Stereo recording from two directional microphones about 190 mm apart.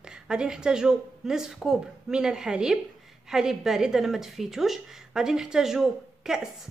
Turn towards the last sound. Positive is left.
turn(degrees=0)  # may be behind; listen again after turning